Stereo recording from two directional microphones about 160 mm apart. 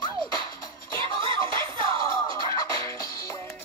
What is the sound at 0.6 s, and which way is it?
Music, 30° right (ahead or behind).